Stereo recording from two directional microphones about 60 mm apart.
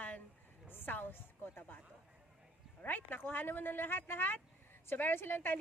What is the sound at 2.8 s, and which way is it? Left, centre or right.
A woman's voice, left.